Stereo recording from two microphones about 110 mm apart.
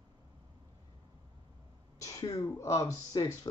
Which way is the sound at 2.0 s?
30° left (ahead or behind).